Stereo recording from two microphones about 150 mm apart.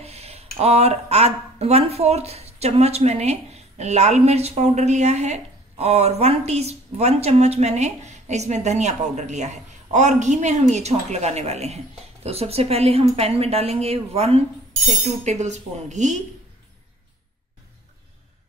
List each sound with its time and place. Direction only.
0.0 s speech: 45° right (ahead or behind)